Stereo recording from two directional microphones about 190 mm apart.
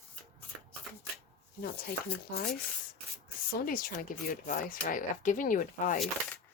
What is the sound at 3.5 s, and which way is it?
Speech, 50° left (ahead or behind).